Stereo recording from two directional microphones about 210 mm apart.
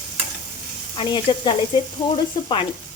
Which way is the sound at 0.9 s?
20° left (ahead or behind).